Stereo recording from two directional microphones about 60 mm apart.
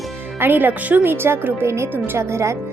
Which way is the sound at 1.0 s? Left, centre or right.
Right.